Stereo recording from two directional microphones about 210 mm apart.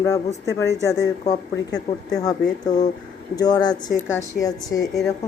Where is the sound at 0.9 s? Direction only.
15° left (ahead or behind).